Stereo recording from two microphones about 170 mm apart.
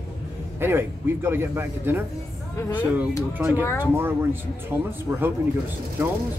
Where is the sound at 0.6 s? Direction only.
15° right (ahead or behind).